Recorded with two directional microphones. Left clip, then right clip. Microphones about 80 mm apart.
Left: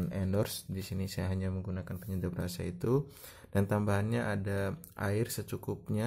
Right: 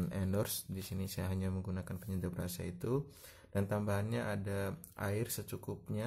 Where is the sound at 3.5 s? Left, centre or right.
Left.